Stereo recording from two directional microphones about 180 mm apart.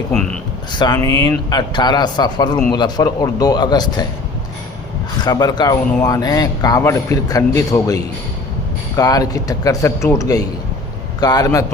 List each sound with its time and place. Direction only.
0.1 s speech: 5° left (ahead or behind)
0.7 s a man's voice: 25° left (ahead or behind)
5.2 s a man's voice: 20° left (ahead or behind)